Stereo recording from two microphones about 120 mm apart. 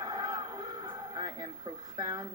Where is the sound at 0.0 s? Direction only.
35° right (ahead or behind).